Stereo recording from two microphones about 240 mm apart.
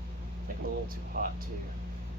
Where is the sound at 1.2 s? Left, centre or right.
Right.